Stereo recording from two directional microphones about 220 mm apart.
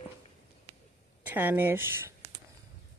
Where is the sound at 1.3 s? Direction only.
10° right (ahead or behind).